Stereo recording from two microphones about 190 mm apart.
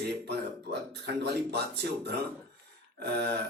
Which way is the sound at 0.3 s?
60° right (ahead or behind).